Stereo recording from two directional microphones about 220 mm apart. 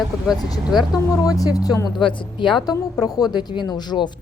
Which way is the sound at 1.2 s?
15° left (ahead or behind).